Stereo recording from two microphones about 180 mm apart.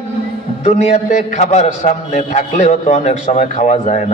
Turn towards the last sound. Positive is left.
turn(degrees=40)  # may be behind; listen again after turning